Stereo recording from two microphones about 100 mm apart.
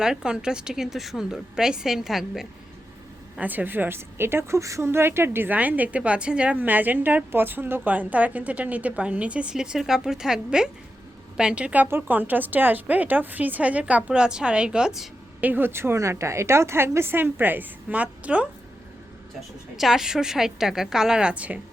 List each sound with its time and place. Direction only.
0.0 s a woman's voice: 5° right (ahead or behind)
3.3 s a woman's voice: 15° right (ahead or behind)
15.4 s a woman's voice: 20° right (ahead or behind)
19.7 s a woman's voice: 5° right (ahead or behind)